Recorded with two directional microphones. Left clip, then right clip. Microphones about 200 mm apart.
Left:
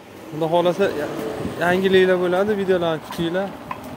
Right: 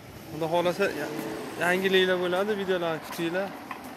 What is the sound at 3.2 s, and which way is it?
Speech, 20° left (ahead or behind).